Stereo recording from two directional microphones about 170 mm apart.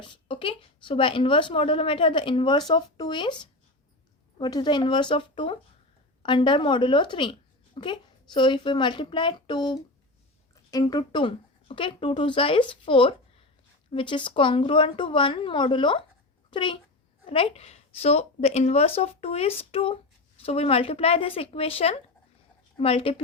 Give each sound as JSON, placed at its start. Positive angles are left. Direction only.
{"t": 0.0, "sound": "a woman's voice", "side_deg": 30}